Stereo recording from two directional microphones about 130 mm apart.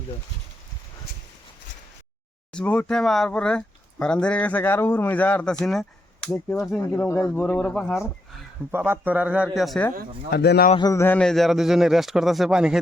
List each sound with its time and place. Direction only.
2.5 s speech: 10° left (ahead or behind)
8.7 s a man's voice: 15° right (ahead or behind); by 9.8 s centre (ahead or behind)
10.8 s a sound: 30° left (ahead or behind)
11.2 s speech: centre (ahead or behind)